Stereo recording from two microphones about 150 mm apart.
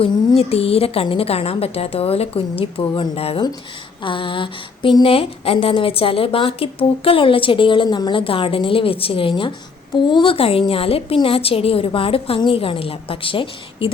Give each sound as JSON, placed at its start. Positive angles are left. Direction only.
{"t": 0.0, "sound": "speech", "side_deg": 40}